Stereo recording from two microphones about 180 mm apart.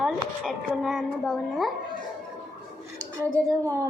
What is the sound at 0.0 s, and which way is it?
A child's voice, centre (ahead or behind).